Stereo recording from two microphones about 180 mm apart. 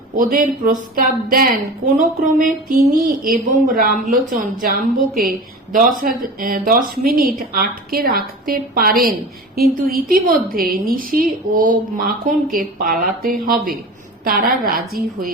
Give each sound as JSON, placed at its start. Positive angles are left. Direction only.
{"t": 0.2, "sound": "a woman's voice", "side_deg": -50}